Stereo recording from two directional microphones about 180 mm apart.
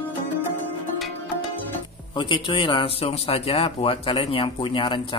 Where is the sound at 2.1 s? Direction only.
25° left (ahead or behind).